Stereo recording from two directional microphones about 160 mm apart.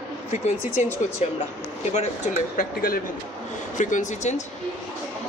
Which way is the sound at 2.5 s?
65° left (ahead or behind).